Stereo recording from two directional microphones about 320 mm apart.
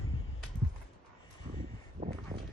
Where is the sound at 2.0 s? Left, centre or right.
Right.